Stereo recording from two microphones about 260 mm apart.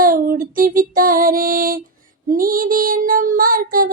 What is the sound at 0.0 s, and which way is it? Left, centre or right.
Music, right.